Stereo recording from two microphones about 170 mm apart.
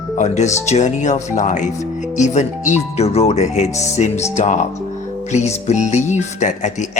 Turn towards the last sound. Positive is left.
turn(degrees=45)  # may be behind; listen again after turning